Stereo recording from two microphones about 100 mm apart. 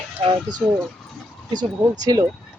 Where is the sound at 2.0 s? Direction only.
40° right (ahead or behind).